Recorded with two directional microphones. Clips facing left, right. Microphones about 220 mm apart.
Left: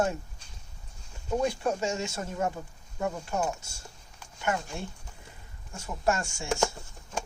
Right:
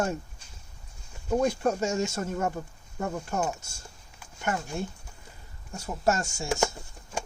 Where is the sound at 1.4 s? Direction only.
45° right (ahead or behind).